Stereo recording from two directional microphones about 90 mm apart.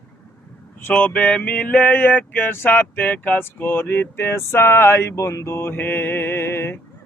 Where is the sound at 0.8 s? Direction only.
20° left (ahead or behind).